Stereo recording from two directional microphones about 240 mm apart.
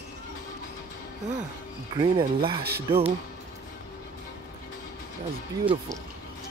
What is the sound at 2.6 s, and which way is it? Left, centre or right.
Speech, right.